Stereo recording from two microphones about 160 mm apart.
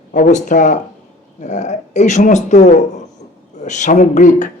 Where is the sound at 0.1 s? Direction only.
50° left (ahead or behind).